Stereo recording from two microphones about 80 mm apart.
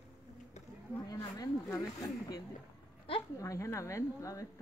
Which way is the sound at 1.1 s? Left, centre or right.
Left.